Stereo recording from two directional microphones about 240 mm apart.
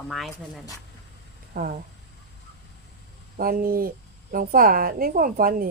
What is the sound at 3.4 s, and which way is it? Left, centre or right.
Speech, right.